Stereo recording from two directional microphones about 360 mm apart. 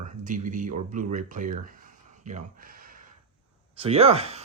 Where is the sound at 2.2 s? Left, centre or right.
Centre.